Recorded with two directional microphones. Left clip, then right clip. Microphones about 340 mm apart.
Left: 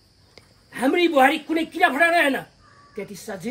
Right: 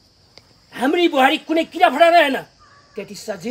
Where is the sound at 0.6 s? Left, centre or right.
Centre.